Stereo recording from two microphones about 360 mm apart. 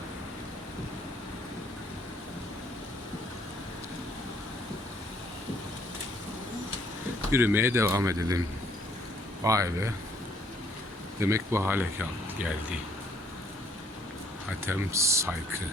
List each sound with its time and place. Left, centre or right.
7.3 s speech: centre
9.4 s speech: centre
11.2 s speech: centre
14.7 s speech: centre